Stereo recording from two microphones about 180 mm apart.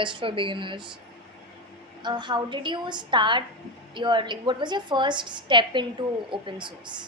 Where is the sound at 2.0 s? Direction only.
25° right (ahead or behind).